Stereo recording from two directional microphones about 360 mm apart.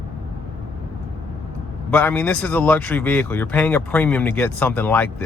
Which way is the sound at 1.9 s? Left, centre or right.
Centre.